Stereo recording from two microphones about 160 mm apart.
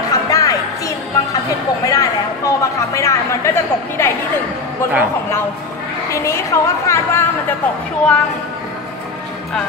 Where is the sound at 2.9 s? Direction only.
20° left (ahead or behind).